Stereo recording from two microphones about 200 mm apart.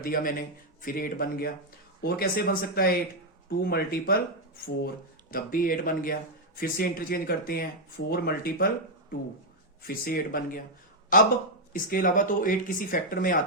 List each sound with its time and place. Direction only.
0.0 s speech: 45° left (ahead or behind)
5.3 s speech: 45° left (ahead or behind)